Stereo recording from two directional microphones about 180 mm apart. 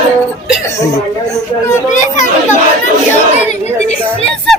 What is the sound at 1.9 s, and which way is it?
Speech, 45° left (ahead or behind).